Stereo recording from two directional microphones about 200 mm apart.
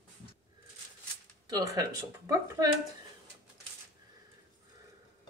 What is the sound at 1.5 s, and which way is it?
Speech, 20° right (ahead or behind).